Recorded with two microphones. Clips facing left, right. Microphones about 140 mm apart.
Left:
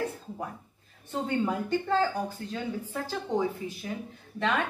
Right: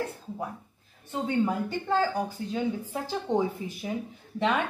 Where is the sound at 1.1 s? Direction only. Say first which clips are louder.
Right 2 dB; centre (ahead or behind).